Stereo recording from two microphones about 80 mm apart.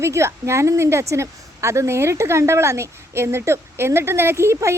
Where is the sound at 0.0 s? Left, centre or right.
Right.